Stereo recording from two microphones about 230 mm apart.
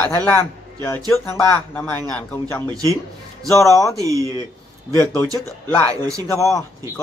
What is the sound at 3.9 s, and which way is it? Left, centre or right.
Speech, centre.